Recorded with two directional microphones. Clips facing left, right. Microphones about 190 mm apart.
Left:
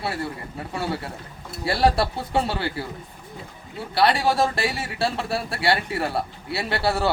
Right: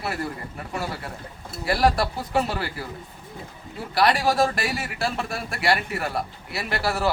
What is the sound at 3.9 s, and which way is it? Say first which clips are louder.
A man's voice: left 1 dB; 30° left (ahead or behind).